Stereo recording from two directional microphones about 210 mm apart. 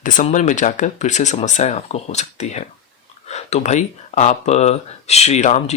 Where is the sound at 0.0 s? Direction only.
35° left (ahead or behind).